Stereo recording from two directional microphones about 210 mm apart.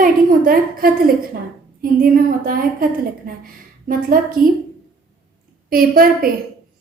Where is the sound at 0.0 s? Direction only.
40° right (ahead or behind).